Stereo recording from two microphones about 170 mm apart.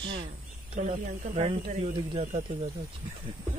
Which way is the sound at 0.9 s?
50° right (ahead or behind).